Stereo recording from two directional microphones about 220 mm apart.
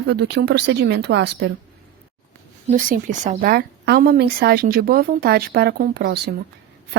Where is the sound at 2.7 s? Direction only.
35° right (ahead or behind).